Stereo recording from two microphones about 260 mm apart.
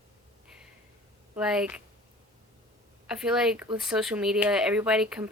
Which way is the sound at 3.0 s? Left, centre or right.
Centre.